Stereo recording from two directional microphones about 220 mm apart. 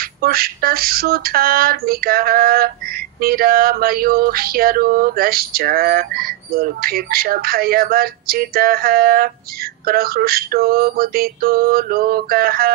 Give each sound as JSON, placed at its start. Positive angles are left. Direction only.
{"t": 0.0, "sound": "female singing", "side_deg": -40}